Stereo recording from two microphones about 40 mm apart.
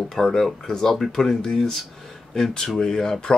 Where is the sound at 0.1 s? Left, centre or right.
Centre.